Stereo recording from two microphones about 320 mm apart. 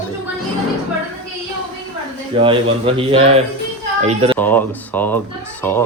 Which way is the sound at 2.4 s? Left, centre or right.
Centre.